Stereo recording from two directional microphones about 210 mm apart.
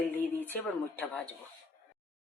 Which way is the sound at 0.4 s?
10° left (ahead or behind).